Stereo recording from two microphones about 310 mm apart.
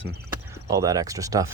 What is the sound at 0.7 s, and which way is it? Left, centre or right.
Speech, centre.